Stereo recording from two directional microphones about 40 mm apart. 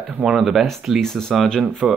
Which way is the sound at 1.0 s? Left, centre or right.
Centre.